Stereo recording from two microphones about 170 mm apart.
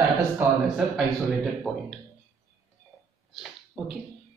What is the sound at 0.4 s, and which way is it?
Speech, 5° right (ahead or behind).